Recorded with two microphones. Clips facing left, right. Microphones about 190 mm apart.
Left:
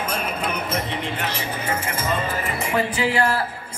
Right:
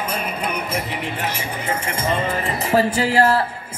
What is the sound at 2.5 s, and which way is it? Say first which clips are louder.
Speech: right 7 dB; 40° right (ahead or behind).